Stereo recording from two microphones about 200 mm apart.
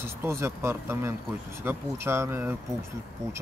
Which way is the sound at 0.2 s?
15° right (ahead or behind).